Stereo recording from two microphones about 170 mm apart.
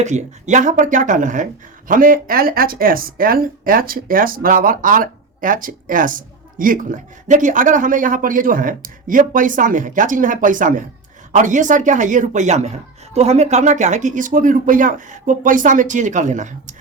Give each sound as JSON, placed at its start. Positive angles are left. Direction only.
{"t": 0.0, "sound": "speech", "side_deg": -45}